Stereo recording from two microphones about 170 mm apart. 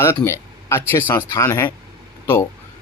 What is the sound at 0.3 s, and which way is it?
Speech, 15° left (ahead or behind).